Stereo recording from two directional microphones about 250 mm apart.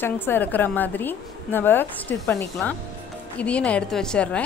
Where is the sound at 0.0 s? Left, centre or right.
Centre.